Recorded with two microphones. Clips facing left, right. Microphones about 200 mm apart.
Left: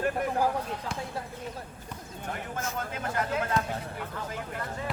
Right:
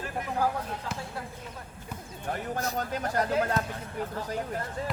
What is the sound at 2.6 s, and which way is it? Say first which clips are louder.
Speech: right 3 dB; 35° right (ahead or behind).